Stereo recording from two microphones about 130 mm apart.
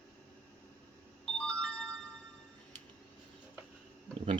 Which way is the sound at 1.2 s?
5° left (ahead or behind).